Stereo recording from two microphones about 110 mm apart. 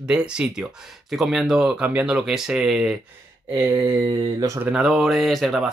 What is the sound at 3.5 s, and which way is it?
Speech, 25° right (ahead or behind).